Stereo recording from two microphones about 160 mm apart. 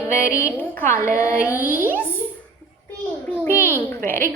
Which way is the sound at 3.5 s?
15° right (ahead or behind).